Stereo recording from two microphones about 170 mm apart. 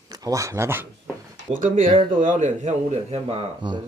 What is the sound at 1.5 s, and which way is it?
Speech, 50° right (ahead or behind).